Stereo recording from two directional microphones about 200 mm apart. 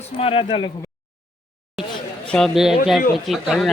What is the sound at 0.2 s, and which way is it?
Speech, 30° left (ahead or behind).